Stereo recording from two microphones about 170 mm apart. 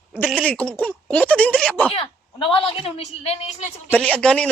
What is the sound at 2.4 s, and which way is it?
A woman's voice, 30° left (ahead or behind).